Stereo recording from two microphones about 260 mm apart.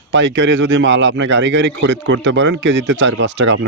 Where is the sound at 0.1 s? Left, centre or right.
Right.